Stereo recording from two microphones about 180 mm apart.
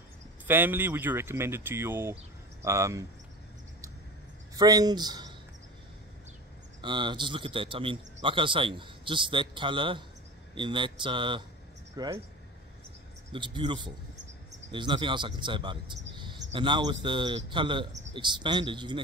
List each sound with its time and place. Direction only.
0.5 s speech: 10° right (ahead or behind)
4.6 s a man's voice: 20° right (ahead or behind)
6.8 s a man's voice: 25° right (ahead or behind)
13.3 s a man's voice: 25° right (ahead or behind)